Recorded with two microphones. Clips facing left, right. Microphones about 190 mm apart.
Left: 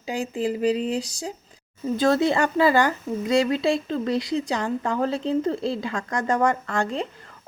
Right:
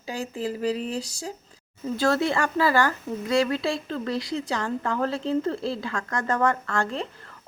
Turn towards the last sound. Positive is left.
turn(degrees=15)  # may be behind; listen again after turning